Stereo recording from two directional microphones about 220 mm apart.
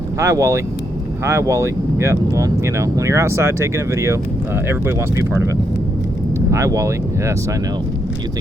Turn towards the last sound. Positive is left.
turn(degrees=-15)  # may be behind; listen again after turning